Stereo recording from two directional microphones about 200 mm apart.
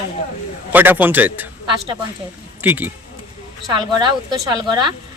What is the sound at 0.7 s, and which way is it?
Speech, 10° right (ahead or behind).